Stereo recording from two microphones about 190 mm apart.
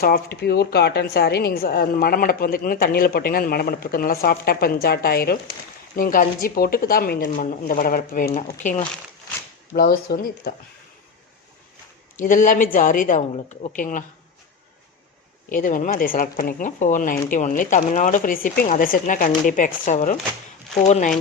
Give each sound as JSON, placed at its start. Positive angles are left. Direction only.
{"t": 0.0, "sound": "a woman's voice", "side_deg": 55}
{"t": 9.7, "sound": "a woman's voice", "side_deg": 55}
{"t": 12.1, "sound": "a woman's voice", "side_deg": 45}
{"t": 15.4, "sound": "a woman's voice", "side_deg": 45}